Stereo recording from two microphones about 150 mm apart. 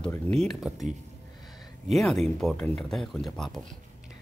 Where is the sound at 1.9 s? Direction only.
Centre (ahead or behind).